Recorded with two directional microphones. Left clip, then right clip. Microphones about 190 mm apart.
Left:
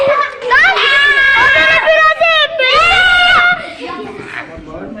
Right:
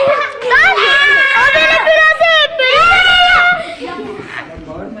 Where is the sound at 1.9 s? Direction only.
15° right (ahead or behind).